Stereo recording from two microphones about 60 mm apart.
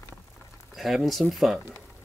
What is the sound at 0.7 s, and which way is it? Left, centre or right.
Speech, centre.